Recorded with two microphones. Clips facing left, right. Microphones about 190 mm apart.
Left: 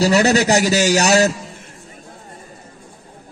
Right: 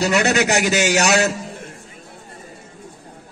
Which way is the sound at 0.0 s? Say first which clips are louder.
Left 3 dB; 35° left (ahead or behind).